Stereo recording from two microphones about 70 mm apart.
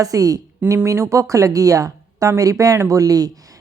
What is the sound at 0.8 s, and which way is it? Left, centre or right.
Speech, right.